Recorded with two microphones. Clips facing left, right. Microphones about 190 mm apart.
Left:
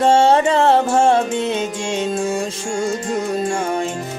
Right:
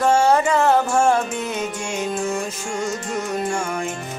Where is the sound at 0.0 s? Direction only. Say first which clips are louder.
Left 3 dB; 25° left (ahead or behind).